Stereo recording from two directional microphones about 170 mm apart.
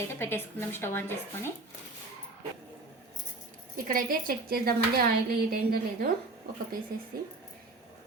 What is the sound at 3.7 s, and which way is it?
A woman's voice, 55° right (ahead or behind).